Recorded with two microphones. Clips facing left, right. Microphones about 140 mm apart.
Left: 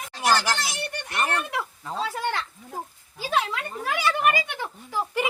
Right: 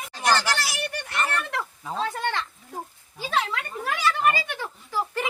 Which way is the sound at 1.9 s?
5° left (ahead or behind).